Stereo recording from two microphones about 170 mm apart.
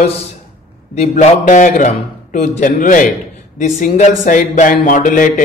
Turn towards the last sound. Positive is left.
turn(degrees=50)  # may be behind; listen again after turning